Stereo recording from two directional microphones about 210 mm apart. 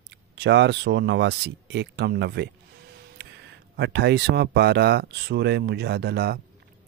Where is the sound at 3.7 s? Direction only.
55° right (ahead or behind).